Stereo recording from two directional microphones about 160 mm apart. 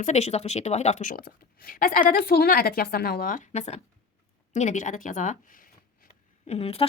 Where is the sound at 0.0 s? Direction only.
45° left (ahead or behind).